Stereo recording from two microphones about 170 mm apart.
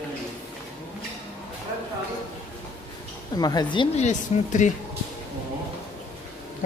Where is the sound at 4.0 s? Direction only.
45° left (ahead or behind).